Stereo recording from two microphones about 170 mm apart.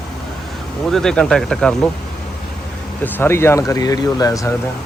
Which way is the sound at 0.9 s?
5° left (ahead or behind).